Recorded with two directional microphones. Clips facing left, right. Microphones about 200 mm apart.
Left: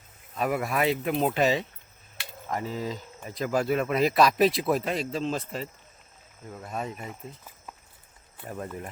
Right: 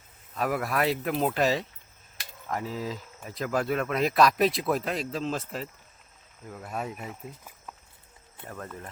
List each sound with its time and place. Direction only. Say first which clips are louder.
0.3 s speech: left 1 dB; centre (ahead or behind)
8.4 s speech: left 4 dB; 15° left (ahead or behind)